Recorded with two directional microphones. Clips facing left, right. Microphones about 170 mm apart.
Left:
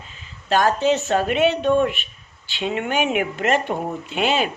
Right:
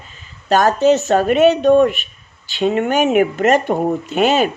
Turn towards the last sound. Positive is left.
turn(degrees=-45)  # may be behind; listen again after turning